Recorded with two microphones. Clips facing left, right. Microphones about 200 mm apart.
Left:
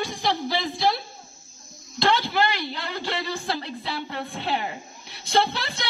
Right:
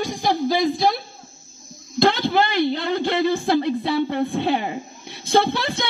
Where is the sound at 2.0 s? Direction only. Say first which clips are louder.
Right 5 dB; 50° right (ahead or behind).